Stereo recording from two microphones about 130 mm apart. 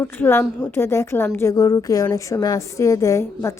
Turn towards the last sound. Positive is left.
turn(degrees=25)  # may be behind; listen again after turning